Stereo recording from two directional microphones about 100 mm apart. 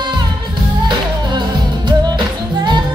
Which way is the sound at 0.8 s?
50° right (ahead or behind).